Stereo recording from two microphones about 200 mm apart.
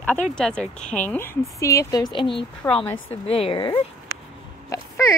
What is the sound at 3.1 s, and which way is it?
A woman's voice, 30° left (ahead or behind).